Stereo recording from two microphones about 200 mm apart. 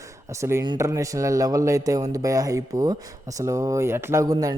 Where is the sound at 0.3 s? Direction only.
15° right (ahead or behind).